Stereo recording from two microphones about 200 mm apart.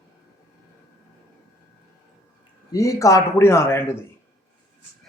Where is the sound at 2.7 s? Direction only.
15° left (ahead or behind).